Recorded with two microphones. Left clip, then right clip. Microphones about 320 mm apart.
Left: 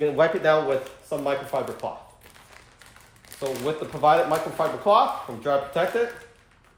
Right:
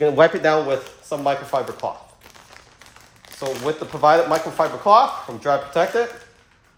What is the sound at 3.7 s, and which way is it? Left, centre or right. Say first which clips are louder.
Speech: right 4 dB; right.